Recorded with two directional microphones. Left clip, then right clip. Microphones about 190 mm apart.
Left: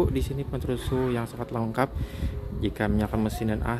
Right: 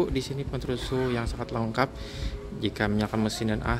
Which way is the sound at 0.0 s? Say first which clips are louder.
Left 1 dB; 15° left (ahead or behind).